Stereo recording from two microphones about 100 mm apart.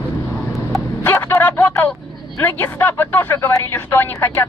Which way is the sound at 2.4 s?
20° left (ahead or behind).